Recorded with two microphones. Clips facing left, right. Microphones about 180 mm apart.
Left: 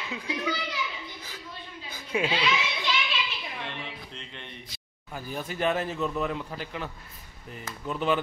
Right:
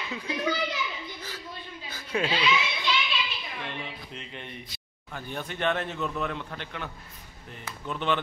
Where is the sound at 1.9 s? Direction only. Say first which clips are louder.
Left 1 dB; 10° left (ahead or behind).